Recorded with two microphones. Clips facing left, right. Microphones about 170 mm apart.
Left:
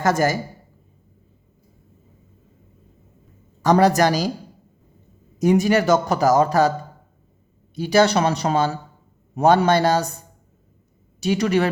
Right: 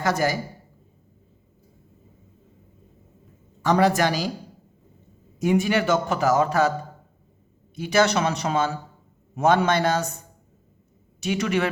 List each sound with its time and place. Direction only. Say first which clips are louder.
0.0 s a woman's voice: left 4 dB; 45° left (ahead or behind)
3.6 s speech: left 4 dB; 40° left (ahead or behind)
5.4 s speech: left 4 dB; 40° left (ahead or behind)
7.8 s speech: left 4 dB; 35° left (ahead or behind)
11.2 s speech: left 4 dB; 35° left (ahead or behind)